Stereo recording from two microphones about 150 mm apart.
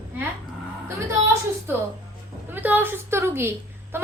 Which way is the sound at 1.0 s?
20° right (ahead or behind).